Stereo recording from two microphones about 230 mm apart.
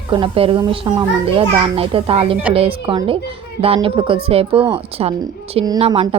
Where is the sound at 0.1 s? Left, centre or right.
Right.